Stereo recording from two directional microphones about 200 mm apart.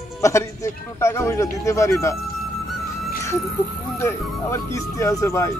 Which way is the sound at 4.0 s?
15° left (ahead or behind).